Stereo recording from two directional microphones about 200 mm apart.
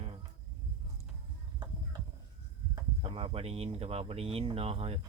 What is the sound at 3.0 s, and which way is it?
Speech, 30° right (ahead or behind).